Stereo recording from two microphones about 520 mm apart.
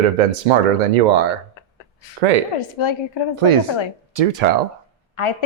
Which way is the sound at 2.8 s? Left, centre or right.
Left.